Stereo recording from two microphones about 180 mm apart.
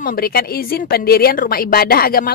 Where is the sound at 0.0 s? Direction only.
55° left (ahead or behind).